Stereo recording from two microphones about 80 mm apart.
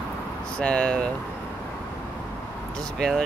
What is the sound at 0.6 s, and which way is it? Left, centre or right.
Speech, centre.